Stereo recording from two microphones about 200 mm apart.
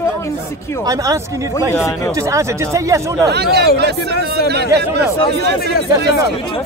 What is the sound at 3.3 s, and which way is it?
A man's voice, 55° right (ahead or behind).